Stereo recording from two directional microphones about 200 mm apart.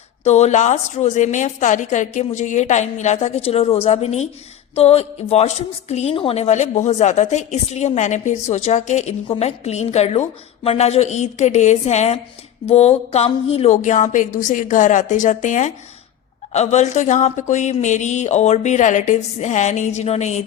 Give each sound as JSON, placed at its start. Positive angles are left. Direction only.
{"t": 0.3, "sound": "a woman's voice", "side_deg": 35}